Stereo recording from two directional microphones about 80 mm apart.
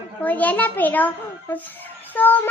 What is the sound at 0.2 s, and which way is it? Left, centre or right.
A child's voice, centre.